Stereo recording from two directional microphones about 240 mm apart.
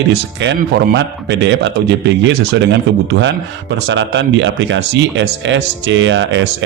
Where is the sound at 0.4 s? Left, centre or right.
Right.